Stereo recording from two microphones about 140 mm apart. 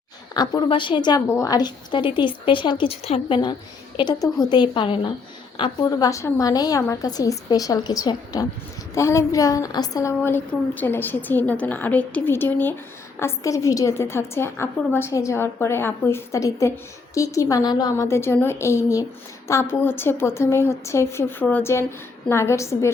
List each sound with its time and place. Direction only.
0.3 s a woman's voice: 35° left (ahead or behind)
6.1 s a woman's voice: 20° left (ahead or behind)